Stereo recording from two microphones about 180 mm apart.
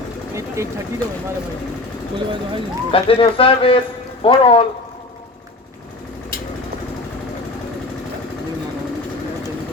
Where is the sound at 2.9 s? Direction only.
30° left (ahead or behind).